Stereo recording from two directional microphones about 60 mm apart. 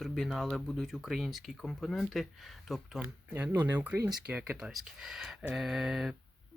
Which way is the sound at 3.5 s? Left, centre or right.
Right.